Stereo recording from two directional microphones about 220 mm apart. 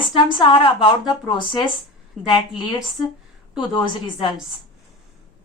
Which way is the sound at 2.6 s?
20° left (ahead or behind).